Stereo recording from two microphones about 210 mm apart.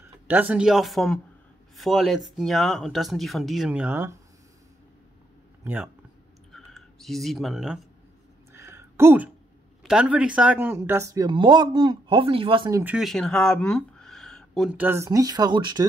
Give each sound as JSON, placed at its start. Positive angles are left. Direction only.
{"t": 0.3, "sound": "speech", "side_deg": -10}
{"t": 5.6, "sound": "speech", "side_deg": -10}
{"t": 6.5, "sound": "a sound", "side_deg": 0}
{"t": 8.5, "sound": "a sound", "side_deg": -15}
{"t": 9.8, "sound": "speech", "side_deg": -5}
{"t": 12.6, "sound": "speech", "side_deg": -10}